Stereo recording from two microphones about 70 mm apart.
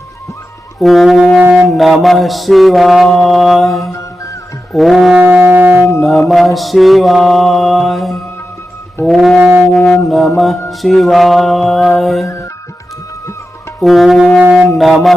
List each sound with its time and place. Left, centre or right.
0.8 s mantra: centre
1.4 s music: right
1.7 s mantra: centre
5.1 s music: right
6.0 s mantra: centre
9.4 s brass instrument: right
9.7 s mantra: centre
10.1 s mantra: centre
13.8 s mantra: centre